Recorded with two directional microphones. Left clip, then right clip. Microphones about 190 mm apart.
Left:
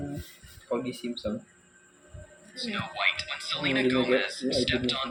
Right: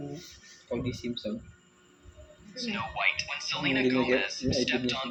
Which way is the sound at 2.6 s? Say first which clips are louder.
Left 1 dB; 5° left (ahead or behind).